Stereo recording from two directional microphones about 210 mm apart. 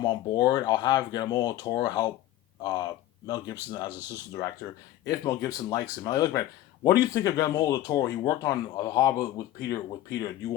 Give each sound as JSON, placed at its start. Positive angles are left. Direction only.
{"t": 0.0, "sound": "speech", "side_deg": 20}